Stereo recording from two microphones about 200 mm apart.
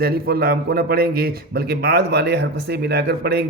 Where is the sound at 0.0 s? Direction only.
50° right (ahead or behind).